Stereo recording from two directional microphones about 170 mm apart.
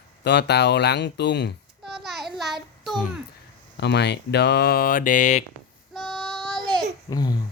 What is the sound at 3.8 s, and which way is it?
Speech, 80° left.